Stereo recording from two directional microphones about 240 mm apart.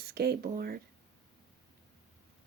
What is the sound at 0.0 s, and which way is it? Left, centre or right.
Speech, right.